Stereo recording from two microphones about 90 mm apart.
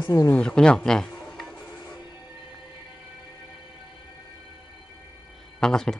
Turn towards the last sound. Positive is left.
turn(degrees=5)  # may be behind; listen again after turning